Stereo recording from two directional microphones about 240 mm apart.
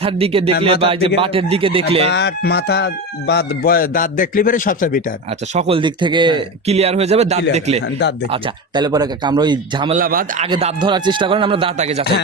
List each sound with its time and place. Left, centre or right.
0.0 s speech: right
2.0 s speech: left
5.5 s speech: right
7.9 s speech: left
8.3 s speech: centre
9.9 s a man's voice: right
10.4 s speech: right